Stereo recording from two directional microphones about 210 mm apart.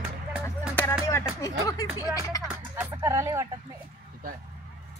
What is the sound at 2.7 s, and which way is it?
Speech, 15° right (ahead or behind).